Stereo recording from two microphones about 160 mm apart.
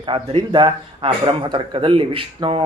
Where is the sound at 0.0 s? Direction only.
30° right (ahead or behind).